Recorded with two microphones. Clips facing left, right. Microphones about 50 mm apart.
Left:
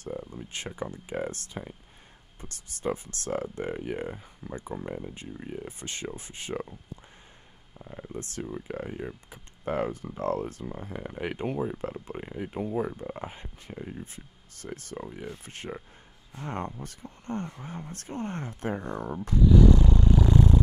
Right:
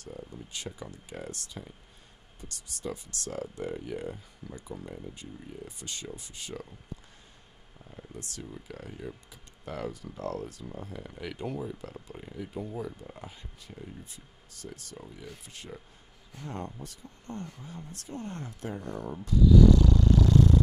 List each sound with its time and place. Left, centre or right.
0.0 s speech: left
7.8 s speech: left